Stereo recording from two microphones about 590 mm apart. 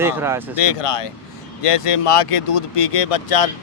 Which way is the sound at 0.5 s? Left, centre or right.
Left.